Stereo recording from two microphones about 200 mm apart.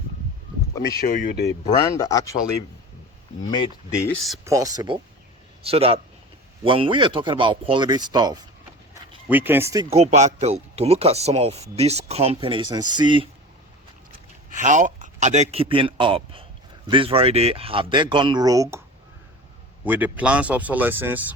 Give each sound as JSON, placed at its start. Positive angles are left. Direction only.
{"t": 0.8, "sound": "speech", "side_deg": 45}
{"t": 1.5, "sound": "speech", "side_deg": 15}
{"t": 4.4, "sound": "speech", "side_deg": -15}
{"t": 9.3, "sound": "speech", "side_deg": -10}
{"t": 9.9, "sound": "speech", "side_deg": -35}
{"t": 14.5, "sound": "a man's voice", "side_deg": -40}
{"t": 19.8, "sound": "speech", "side_deg": -10}